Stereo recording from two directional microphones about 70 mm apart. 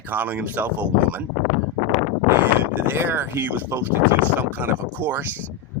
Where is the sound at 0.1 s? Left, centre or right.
Right.